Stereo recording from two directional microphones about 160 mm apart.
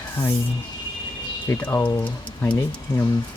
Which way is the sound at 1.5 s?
15° left (ahead or behind).